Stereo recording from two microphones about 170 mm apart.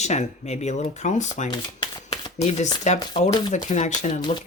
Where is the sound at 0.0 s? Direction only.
40° left (ahead or behind).